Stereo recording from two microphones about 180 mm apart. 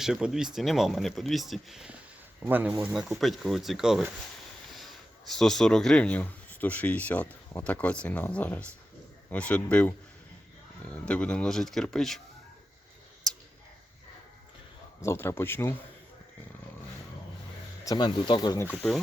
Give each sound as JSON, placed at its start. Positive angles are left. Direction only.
{"t": 0.0, "sound": "speech", "side_deg": 0}
{"t": 5.3, "sound": "speech", "side_deg": 0}
{"t": 15.0, "sound": "speech", "side_deg": 15}
{"t": 17.8, "sound": "speech", "side_deg": 25}